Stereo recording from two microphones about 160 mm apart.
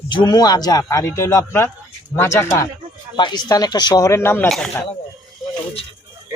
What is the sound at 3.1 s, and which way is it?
Speech, 25° left (ahead or behind).